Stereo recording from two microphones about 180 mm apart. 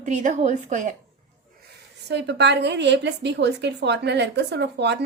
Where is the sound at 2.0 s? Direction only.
75° right (ahead or behind).